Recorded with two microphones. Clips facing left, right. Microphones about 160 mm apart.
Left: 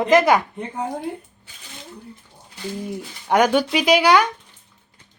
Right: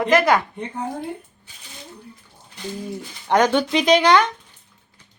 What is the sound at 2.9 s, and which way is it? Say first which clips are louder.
A woman's voice: even; 10° left (ahead or behind).